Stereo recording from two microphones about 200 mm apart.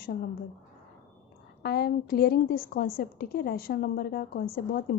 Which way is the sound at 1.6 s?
50° left (ahead or behind).